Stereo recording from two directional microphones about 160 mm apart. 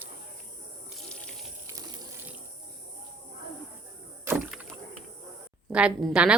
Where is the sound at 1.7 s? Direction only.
25° right (ahead or behind).